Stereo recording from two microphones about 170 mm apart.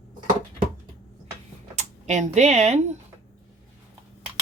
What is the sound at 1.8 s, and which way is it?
Speech, 45° right (ahead or behind).